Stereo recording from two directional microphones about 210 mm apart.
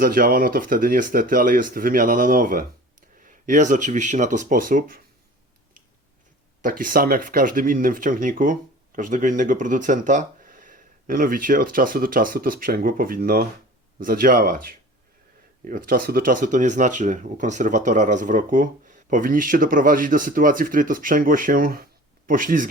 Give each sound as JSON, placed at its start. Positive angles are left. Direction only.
{"t": 0.0, "sound": "speech", "side_deg": -45}
{"t": 6.6, "sound": "speech", "side_deg": -40}